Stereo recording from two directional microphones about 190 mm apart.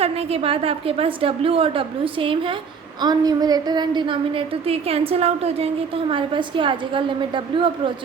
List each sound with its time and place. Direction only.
0.0 s a woman's voice: 30° right (ahead or behind)